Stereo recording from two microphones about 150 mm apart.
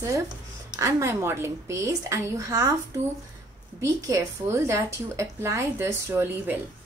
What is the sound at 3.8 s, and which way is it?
A woman's voice, 20° right (ahead or behind).